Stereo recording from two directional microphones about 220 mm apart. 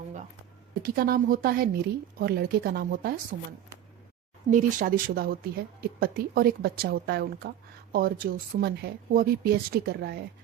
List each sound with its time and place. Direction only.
0.8 s a woman's voice: 40° right (ahead or behind)
4.5 s a woman's voice: 40° right (ahead or behind)